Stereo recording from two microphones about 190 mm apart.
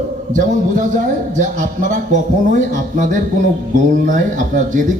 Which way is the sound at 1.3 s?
40° right (ahead or behind).